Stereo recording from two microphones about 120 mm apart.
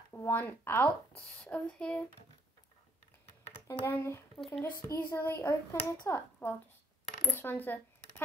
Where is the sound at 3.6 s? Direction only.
20° left (ahead or behind).